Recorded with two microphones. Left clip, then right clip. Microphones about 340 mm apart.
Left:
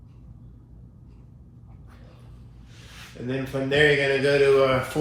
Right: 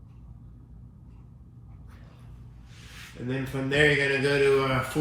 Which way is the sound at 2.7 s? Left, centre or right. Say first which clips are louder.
Left 2 dB; centre.